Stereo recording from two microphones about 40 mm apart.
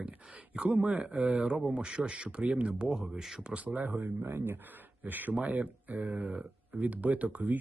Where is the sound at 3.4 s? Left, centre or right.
Right.